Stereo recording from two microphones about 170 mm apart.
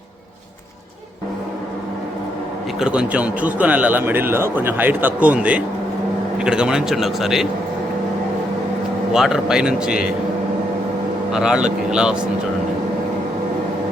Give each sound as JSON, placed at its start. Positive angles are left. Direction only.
{"t": 2.7, "sound": "a man's voice", "side_deg": -5}
{"t": 9.1, "sound": "speech", "side_deg": 0}
{"t": 11.3, "sound": "speech", "side_deg": -5}